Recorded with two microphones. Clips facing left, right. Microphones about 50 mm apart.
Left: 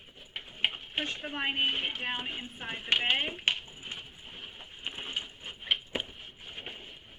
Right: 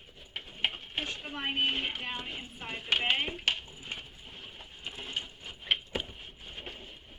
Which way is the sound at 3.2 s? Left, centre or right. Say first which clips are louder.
Left 1 dB; left.